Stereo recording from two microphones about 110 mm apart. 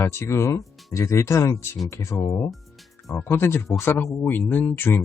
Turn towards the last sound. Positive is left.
turn(degrees=20)  # may be behind; listen again after turning